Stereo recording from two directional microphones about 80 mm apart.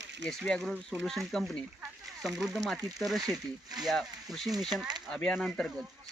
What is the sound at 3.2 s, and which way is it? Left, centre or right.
Speech, right.